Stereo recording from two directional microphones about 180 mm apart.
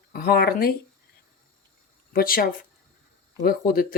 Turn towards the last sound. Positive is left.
turn(degrees=55)  # may be behind; listen again after turning